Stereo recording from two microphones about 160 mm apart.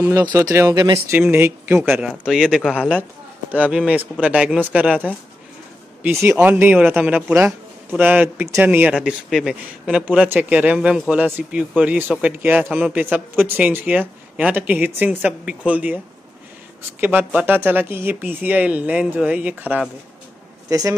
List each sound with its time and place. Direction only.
0.0 s a man's voice: 15° right (ahead or behind)
17.0 s a man's voice: 10° right (ahead or behind)
20.7 s speech: 20° right (ahead or behind)